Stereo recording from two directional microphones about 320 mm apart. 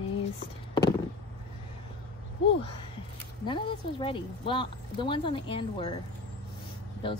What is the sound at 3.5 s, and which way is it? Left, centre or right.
Speech, centre.